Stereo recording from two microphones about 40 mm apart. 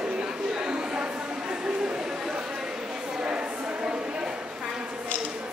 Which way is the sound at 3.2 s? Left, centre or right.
Right.